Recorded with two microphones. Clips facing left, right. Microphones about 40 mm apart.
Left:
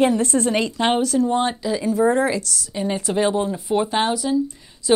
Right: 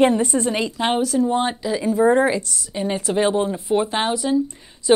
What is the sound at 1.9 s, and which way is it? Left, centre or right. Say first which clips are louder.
Speech: right 2 dB; right.